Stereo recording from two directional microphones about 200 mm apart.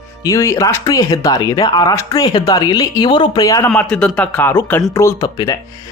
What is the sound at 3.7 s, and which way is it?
Speech, 5° left (ahead or behind).